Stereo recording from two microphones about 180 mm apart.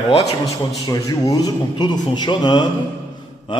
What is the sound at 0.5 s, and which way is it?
A man's voice, 20° left (ahead or behind).